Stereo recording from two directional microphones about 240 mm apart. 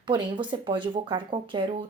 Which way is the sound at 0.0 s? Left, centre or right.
Centre.